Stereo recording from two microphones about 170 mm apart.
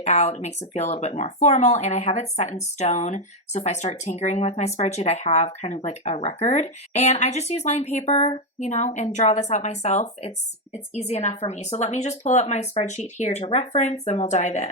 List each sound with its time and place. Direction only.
0.0 s speech: 40° left (ahead or behind)